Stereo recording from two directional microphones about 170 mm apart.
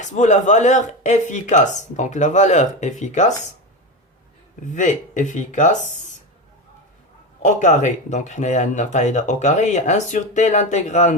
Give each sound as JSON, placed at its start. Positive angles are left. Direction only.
{"t": 0.0, "sound": "speech", "side_deg": 45}
{"t": 4.7, "sound": "speech", "side_deg": 45}
{"t": 7.4, "sound": "speech", "side_deg": 45}